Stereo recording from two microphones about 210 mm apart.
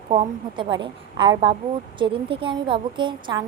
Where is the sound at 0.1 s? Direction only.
25° right (ahead or behind).